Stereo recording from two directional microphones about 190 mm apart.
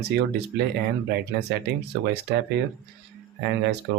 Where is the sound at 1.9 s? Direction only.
65° right (ahead or behind).